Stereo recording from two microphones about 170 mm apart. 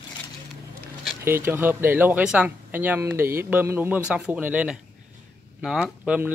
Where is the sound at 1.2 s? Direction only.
15° right (ahead or behind).